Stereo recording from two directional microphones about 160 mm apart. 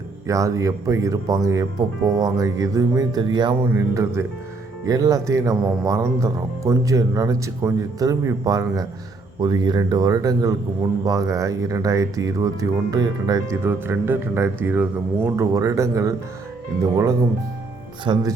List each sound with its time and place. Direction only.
0.3 s speech: 20° right (ahead or behind)
13.7 s speech: 15° right (ahead or behind); by 18.3 s 30° right (ahead or behind)